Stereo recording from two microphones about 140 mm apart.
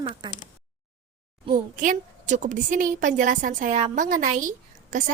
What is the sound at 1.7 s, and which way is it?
A woman's voice, 65° right (ahead or behind).